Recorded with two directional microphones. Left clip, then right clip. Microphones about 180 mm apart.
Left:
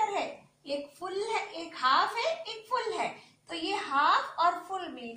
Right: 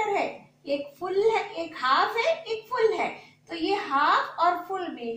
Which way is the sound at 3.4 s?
15° left (ahead or behind).